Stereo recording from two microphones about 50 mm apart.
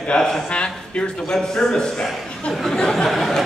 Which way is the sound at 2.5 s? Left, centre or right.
Centre.